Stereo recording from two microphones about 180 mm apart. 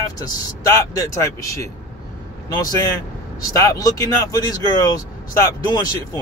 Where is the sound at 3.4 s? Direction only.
20° left (ahead or behind).